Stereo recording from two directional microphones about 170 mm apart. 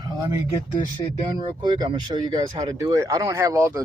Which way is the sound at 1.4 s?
25° right (ahead or behind).